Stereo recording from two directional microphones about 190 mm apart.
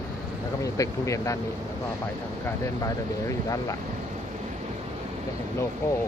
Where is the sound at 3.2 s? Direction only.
15° left (ahead or behind).